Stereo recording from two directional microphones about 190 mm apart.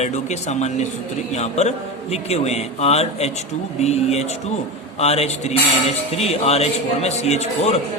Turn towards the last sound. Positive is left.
turn(degrees=35)  # may be behind; listen again after turning